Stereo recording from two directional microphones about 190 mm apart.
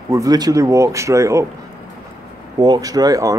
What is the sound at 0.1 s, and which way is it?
Speech, 20° right (ahead or behind).